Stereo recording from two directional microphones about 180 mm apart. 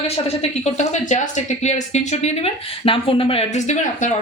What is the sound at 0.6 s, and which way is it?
Speech, 40° left (ahead or behind).